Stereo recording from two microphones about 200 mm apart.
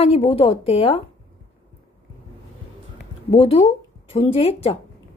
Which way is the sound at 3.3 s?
30° left (ahead or behind).